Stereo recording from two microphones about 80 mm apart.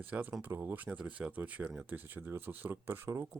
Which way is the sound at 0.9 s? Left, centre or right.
Centre.